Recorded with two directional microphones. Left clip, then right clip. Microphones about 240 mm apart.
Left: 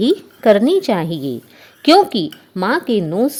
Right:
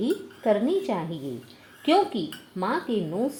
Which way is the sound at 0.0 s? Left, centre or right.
Left.